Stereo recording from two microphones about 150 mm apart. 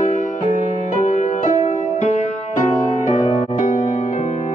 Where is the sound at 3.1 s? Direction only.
50° left (ahead or behind).